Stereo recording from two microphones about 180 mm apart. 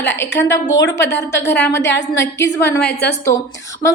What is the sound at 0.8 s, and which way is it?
Speech, 75° left (ahead or behind).